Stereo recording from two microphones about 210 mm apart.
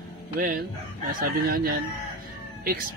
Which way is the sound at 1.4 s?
45° right (ahead or behind).